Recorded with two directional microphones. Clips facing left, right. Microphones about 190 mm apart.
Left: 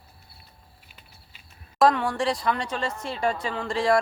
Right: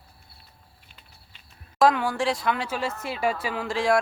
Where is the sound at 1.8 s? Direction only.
Centre (ahead or behind).